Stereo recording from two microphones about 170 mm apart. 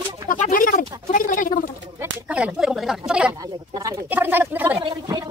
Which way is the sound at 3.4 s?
25° right (ahead or behind).